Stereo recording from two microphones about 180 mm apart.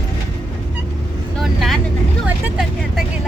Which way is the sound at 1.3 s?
Centre (ahead or behind).